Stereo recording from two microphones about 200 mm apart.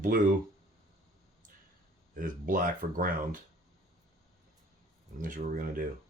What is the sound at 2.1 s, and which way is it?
Speech, 40° right (ahead or behind).